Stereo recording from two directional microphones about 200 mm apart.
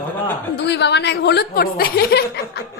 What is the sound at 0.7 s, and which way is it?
A woman's voice, 60° left (ahead or behind).